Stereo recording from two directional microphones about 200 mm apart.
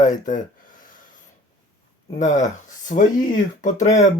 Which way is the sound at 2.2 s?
40° left (ahead or behind).